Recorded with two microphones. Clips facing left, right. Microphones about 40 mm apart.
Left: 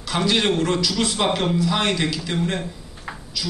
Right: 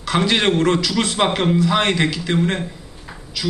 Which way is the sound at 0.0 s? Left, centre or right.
Right.